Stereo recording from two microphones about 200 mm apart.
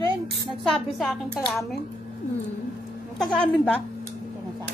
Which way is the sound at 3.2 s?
5° left (ahead or behind).